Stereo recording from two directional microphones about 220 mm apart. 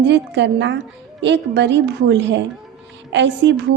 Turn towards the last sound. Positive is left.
turn(degrees=-50)  # may be behind; listen again after turning